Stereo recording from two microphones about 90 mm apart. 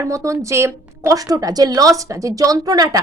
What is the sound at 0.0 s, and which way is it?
A woman's voice, 35° right (ahead or behind).